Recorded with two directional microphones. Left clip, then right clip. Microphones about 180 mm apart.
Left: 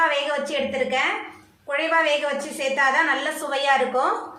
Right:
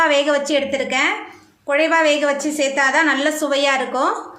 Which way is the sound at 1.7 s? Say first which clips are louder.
Right 5 dB; 70° right (ahead or behind).